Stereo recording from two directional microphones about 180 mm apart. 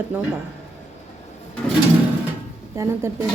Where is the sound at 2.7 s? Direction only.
15° right (ahead or behind).